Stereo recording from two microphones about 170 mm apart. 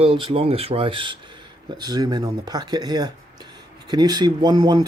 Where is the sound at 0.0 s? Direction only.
30° right (ahead or behind).